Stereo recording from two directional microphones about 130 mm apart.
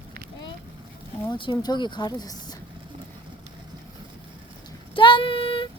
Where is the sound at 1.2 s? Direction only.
35° left (ahead or behind).